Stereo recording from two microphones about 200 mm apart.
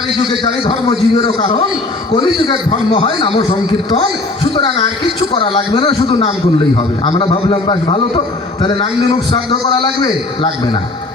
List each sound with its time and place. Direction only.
0.4 s a man's voice: 25° left (ahead or behind)
4.5 s a man's voice: 25° left (ahead or behind)